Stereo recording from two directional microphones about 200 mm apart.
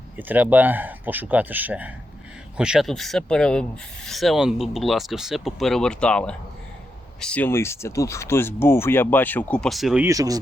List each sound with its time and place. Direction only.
0.2 s speech: 10° right (ahead or behind)
10.1 s speech: 15° right (ahead or behind)